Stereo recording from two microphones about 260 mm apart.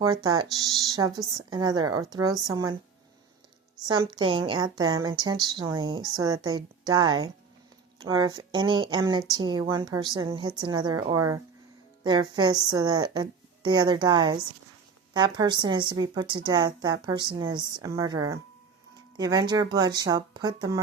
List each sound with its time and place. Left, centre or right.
0.0 s a woman's voice: centre
3.8 s a woman's voice: centre